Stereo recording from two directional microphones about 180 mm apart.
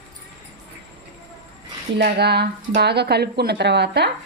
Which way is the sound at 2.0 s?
65° right (ahead or behind).